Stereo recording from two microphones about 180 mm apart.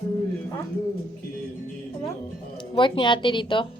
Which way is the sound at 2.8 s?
25° left (ahead or behind).